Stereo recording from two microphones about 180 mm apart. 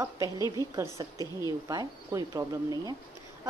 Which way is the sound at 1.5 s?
20° right (ahead or behind).